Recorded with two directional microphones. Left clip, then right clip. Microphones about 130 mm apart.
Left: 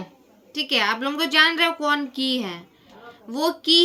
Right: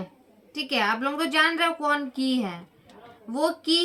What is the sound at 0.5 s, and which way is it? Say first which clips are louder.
Speech: left 3 dB; 20° left (ahead or behind).